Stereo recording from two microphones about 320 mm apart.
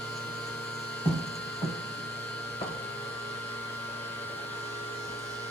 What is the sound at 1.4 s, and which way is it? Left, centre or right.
Printer, centre.